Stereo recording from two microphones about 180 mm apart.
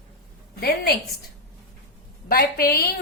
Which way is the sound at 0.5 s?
60° left (ahead or behind).